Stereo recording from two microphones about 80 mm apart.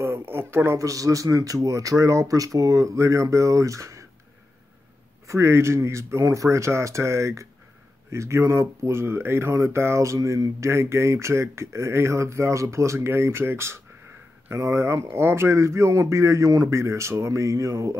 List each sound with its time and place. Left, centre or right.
0.0 s speech: right
5.2 s speech: right